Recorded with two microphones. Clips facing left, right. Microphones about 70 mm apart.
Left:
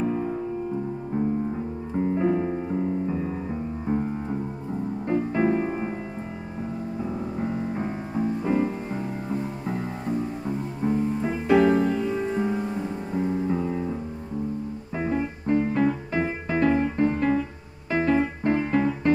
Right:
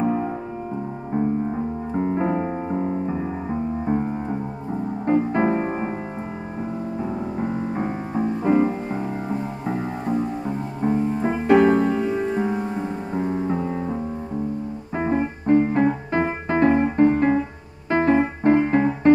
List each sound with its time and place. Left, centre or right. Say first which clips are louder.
0.0 s music: right 4 dB; right
2.0 s music: even; right
7.3 s music: right 3 dB; right
10.4 s music: right 3 dB; right
12.1 s music: right 3 dB; right
15.0 s music: right 4 dB; right
17.9 s piano: right 4 dB; right